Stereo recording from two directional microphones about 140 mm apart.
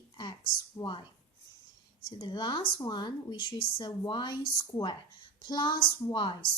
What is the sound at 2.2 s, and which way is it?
A woman's voice, 35° left (ahead or behind).